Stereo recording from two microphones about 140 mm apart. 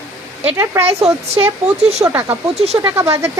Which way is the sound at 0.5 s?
20° right (ahead or behind).